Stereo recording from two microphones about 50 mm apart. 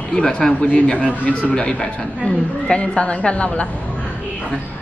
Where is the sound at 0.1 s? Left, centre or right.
Centre.